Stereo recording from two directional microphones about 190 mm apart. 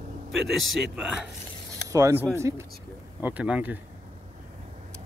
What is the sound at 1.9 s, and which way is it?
Speech, 15° right (ahead or behind).